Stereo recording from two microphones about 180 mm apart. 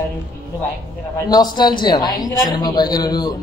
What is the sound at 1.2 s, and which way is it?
Speech, 20° left (ahead or behind).